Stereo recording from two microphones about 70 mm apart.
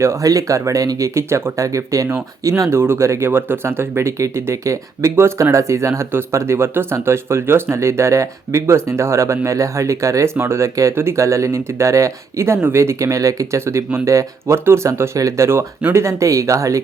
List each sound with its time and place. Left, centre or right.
0.0 s speech: right
0.3 s speech: right